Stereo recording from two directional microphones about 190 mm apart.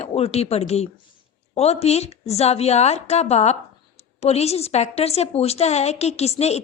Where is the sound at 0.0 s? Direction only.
30° left (ahead or behind).